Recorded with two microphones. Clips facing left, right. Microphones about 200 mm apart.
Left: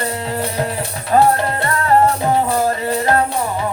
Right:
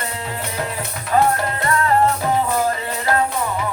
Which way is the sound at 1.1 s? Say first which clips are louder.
Left 4 dB; 35° left (ahead or behind).